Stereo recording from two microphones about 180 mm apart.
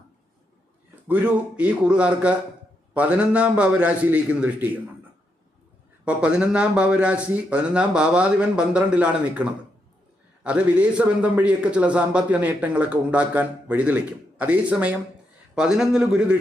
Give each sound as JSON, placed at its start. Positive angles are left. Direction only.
{"t": 1.0, "sound": "a man's voice", "side_deg": -10}
{"t": 6.1, "sound": "a man's voice", "side_deg": -5}